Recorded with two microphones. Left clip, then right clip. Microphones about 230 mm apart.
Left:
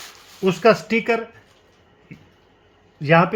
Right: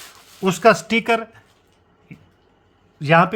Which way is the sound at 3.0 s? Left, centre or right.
Right.